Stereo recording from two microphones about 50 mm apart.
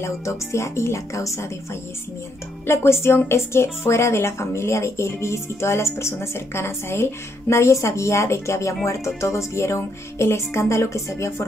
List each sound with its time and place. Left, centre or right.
0.0 s speech: left
2.6 s a woman's voice: left